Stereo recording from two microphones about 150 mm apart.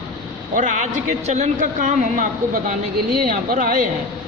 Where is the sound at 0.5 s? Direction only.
55° right (ahead or behind).